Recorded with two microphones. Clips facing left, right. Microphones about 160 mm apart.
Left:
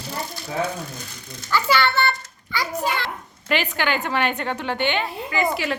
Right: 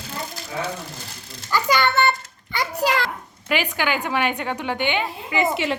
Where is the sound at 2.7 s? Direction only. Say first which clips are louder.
Right 4 dB; 90° right.